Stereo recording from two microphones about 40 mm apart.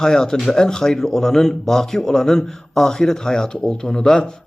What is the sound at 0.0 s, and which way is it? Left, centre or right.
A man's voice, centre.